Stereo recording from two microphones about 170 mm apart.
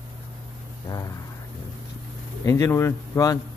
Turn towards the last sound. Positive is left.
turn(degrees=20)  # may be behind; listen again after turning